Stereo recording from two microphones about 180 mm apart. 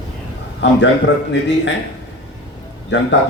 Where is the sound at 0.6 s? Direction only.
75° left (ahead or behind).